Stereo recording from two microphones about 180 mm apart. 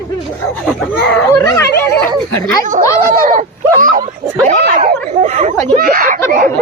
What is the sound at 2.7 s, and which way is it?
Speech, 50° right (ahead or behind).